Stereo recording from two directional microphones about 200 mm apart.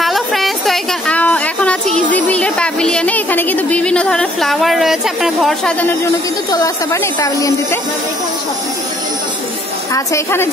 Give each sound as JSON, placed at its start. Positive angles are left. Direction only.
{"t": 0.0, "sound": "a sound", "side_deg": 0}
{"t": 6.5, "sound": "speech", "side_deg": 15}
{"t": 9.9, "sound": "speech", "side_deg": 15}